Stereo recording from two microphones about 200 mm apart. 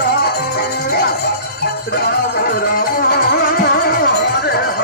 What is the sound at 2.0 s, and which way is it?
Music, 50° left (ahead or behind).